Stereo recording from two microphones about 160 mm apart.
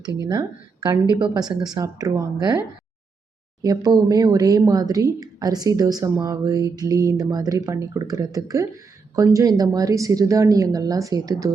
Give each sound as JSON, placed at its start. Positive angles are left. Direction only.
{"t": 0.3, "sound": "speech", "side_deg": -25}